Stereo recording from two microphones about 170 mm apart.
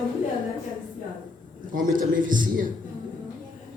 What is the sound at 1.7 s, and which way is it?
Speech, 50° right (ahead or behind).